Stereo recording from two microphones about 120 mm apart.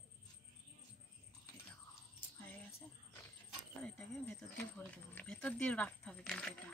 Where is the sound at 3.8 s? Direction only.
10° left (ahead or behind).